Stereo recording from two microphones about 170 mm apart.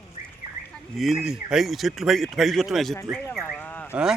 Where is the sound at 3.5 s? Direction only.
10° left (ahead or behind).